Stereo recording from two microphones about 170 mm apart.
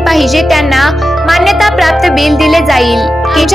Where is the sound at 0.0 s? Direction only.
Centre (ahead or behind).